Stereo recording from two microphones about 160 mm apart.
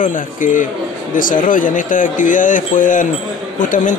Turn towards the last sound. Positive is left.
turn(degrees=55)  # may be behind; listen again after turning